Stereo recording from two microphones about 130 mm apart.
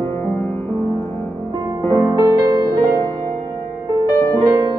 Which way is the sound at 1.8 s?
35° right (ahead or behind).